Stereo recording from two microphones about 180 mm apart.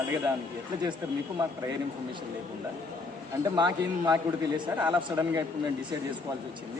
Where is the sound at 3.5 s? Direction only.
25° right (ahead or behind).